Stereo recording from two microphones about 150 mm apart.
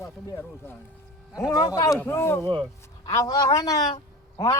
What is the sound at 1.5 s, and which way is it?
Speech, 25° left (ahead or behind).